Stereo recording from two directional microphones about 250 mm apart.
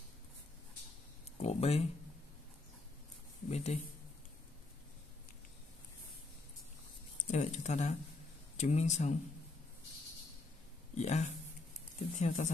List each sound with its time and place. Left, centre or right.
1.4 s a sound: left
3.4 s speech: left
7.2 s speech: left
11.0 s speech: left